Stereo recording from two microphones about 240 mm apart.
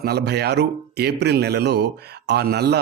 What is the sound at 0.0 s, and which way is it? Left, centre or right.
Speech, right.